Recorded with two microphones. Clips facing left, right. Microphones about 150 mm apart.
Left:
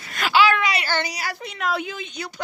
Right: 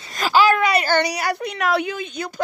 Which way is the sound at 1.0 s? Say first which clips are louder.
Right 8 dB; 60° right (ahead or behind).